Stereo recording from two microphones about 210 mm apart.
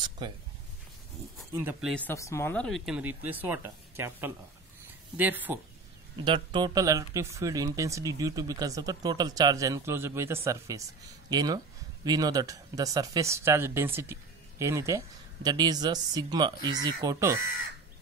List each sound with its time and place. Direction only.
0.2 s speech: 20° right (ahead or behind)
1.5 s speech: 10° right (ahead or behind)
2.0 s speech: 15° left (ahead or behind); by 5.6 s 10° right (ahead or behind)
6.1 s speech: 25° right (ahead or behind)
17.4 s speech: 40° left (ahead or behind)